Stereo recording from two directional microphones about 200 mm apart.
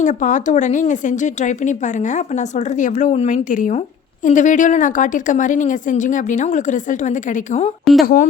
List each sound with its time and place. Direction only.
0.0 s a woman's voice: 40° left (ahead or behind)